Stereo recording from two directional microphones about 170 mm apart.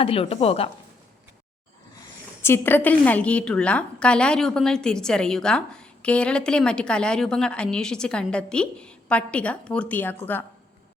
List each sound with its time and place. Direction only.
0.0 s a woman's voice: 35° left (ahead or behind)
2.4 s a woman's voice: 15° left (ahead or behind)